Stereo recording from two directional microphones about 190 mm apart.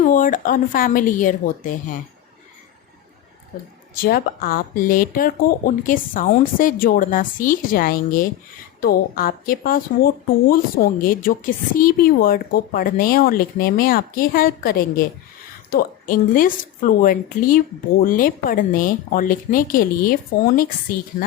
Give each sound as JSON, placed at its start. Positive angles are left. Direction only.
{"t": 0.0, "sound": "a woman's voice", "side_deg": 45}
{"t": 3.9, "sound": "a woman's voice", "side_deg": 50}
{"t": 21.2, "sound": "a woman's voice", "side_deg": 45}